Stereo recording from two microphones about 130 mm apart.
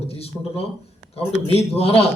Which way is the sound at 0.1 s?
50° left (ahead or behind).